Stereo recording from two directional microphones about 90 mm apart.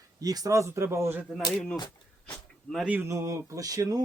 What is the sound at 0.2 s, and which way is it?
Speech, 45° right (ahead or behind).